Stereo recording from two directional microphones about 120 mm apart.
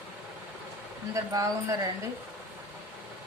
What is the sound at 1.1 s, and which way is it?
Speech, 30° right (ahead or behind).